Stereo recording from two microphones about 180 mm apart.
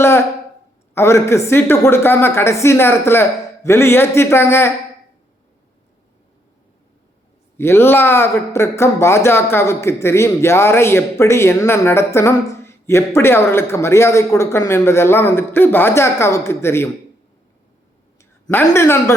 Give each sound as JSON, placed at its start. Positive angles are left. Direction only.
{"t": 0.0, "sound": "a sound", "side_deg": 15}
{"t": 0.9, "sound": "speech", "side_deg": 15}
{"t": 7.5, "sound": "speech", "side_deg": 15}
{"t": 18.2, "sound": "speech", "side_deg": 15}